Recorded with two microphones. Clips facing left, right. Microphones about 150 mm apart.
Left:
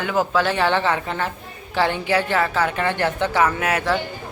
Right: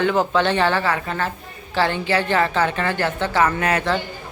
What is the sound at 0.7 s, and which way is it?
A woman's voice, 20° left (ahead or behind).